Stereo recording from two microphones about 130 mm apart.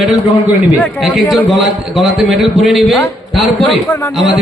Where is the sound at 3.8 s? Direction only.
15° left (ahead or behind).